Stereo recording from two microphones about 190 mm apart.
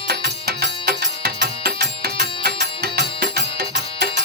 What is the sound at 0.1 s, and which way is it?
Music, 55° right (ahead or behind).